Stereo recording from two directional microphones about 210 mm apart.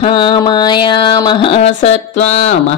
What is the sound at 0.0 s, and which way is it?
Speech, 20° left (ahead or behind).